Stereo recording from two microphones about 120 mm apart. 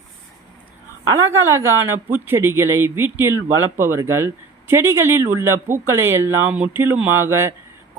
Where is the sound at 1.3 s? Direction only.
20° right (ahead or behind).